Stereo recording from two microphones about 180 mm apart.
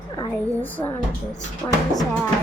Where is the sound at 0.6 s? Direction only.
10° left (ahead or behind).